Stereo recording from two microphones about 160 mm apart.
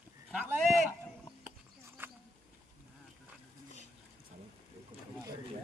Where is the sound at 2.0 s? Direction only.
10° right (ahead or behind).